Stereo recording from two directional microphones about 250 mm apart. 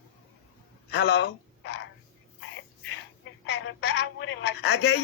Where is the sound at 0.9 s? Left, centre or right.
Left.